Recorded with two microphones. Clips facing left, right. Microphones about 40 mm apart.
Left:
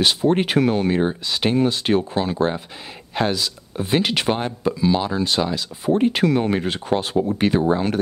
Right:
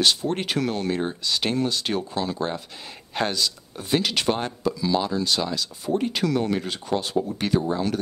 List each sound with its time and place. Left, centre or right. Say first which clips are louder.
0.0 s speech: left 5 dB; left
3.2 s speech: left 3 dB; centre
3.7 s speech: left 4 dB; left
5.9 s speech: left 6 dB; left